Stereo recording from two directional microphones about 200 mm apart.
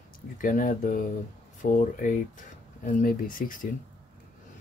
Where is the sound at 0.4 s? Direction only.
40° left (ahead or behind).